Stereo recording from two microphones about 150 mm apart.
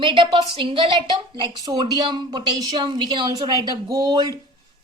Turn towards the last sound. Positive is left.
turn(degrees=-25)  # may be behind; listen again after turning